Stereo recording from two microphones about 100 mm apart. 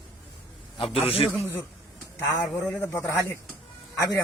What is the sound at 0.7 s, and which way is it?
Speech, 65° left (ahead or behind).